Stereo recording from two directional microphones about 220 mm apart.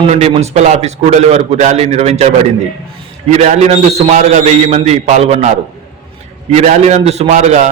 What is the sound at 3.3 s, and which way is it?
A man's voice, 30° right (ahead or behind).